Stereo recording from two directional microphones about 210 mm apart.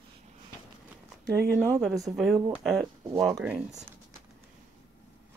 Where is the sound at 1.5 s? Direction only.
5° left (ahead or behind).